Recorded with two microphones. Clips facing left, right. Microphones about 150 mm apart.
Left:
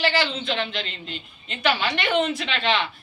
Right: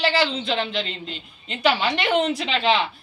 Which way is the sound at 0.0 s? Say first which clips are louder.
Right 2 dB; 35° right (ahead or behind).